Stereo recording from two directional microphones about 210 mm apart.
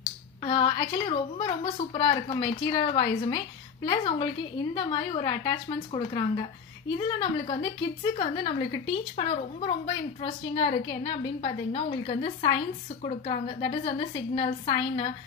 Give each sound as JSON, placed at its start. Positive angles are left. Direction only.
{"t": 0.0, "sound": "speech", "side_deg": 25}